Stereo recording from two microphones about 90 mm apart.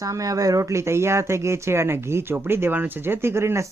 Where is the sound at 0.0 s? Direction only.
40° right (ahead or behind).